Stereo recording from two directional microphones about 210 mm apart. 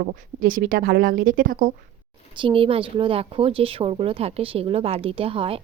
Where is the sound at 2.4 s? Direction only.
25° right (ahead or behind).